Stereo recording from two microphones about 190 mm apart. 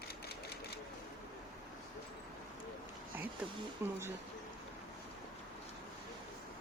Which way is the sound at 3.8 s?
10° right (ahead or behind).